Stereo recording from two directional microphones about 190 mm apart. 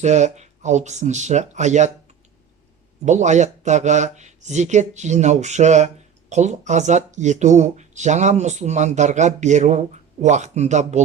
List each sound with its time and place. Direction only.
0.0 s speech: 40° right (ahead or behind)
3.0 s speech: 40° right (ahead or behind)